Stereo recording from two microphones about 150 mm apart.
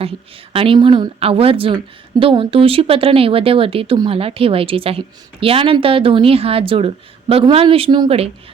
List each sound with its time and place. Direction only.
0.5 s a woman's voice: 35° right (ahead or behind)